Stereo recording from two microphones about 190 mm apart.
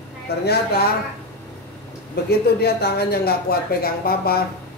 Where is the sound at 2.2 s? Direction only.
55° left (ahead or behind).